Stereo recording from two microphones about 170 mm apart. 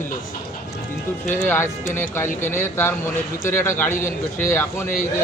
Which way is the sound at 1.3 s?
10° left (ahead or behind).